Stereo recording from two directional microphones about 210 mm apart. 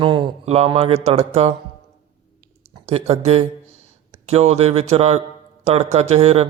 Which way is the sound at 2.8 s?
30° right (ahead or behind).